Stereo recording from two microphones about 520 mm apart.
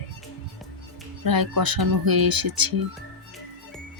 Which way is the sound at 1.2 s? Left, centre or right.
Right.